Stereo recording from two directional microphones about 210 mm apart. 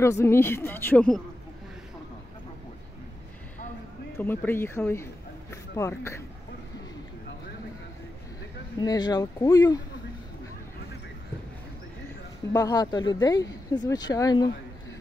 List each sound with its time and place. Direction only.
0.0 s speech: 10° left (ahead or behind)
4.2 s speech: 10° left (ahead or behind)
8.7 s speech: 20° left (ahead or behind)
12.5 s speech: 20° left (ahead or behind)